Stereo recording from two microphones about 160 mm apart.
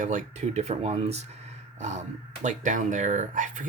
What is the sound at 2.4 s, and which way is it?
Speech, 50° right (ahead or behind).